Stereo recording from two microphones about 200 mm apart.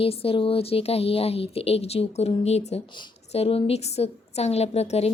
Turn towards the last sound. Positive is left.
turn(degrees=30)  # may be behind; listen again after turning